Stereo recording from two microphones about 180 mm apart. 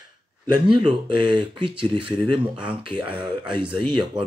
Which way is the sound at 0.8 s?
25° right (ahead or behind).